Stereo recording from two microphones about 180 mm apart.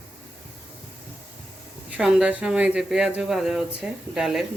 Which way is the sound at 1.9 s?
5° right (ahead or behind).